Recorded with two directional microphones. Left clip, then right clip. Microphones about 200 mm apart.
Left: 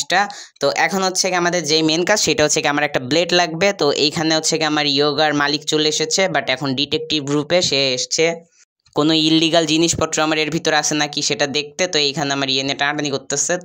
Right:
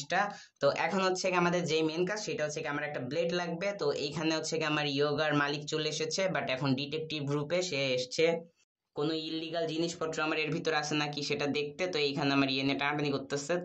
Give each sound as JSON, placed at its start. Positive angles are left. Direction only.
{"t": 0.1, "sound": "speech", "side_deg": 45}
{"t": 1.9, "sound": "speech", "side_deg": 55}
{"t": 8.9, "sound": "speech", "side_deg": 55}